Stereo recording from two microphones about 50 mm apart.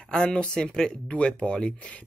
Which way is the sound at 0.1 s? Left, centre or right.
Centre.